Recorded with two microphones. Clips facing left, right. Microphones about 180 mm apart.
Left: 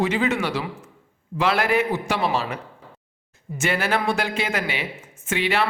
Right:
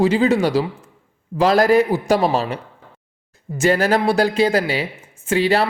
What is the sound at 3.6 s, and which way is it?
A man's voice, 40° right (ahead or behind).